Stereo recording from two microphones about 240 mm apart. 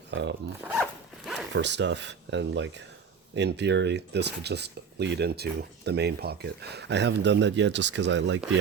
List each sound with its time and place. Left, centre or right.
0.1 s speech: right
0.7 s zipper: centre
1.5 s speech: right